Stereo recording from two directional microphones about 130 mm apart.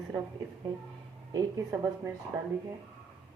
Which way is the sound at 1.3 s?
25° right (ahead or behind).